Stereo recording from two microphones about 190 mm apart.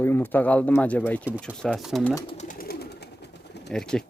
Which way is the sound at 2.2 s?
40° left (ahead or behind).